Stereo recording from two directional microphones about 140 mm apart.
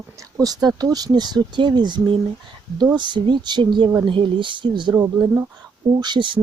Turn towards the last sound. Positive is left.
turn(degrees=-30)  # may be behind; listen again after turning